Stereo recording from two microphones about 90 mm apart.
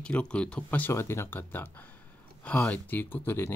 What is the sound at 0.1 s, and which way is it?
Speech, 10° left (ahead or behind).